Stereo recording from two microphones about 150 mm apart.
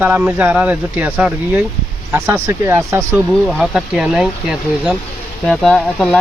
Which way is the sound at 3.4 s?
Centre (ahead or behind).